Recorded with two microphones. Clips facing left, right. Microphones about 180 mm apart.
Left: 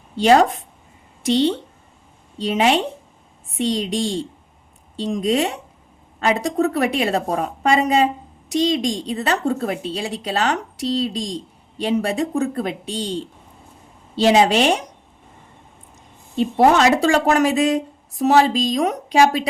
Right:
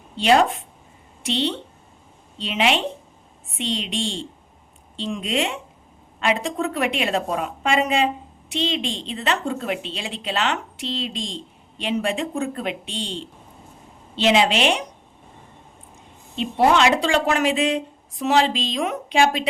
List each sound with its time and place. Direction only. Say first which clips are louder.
0.2 s a woman's voice: left 3 dB; 40° left (ahead or behind)
16.7 s a woman's voice: left 3 dB; 40° left (ahead or behind)